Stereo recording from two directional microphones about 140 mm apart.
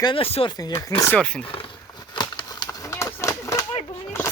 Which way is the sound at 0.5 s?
25° left (ahead or behind).